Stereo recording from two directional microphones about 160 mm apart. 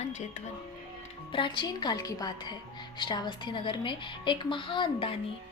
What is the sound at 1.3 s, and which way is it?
A woman's voice, 30° left (ahead or behind).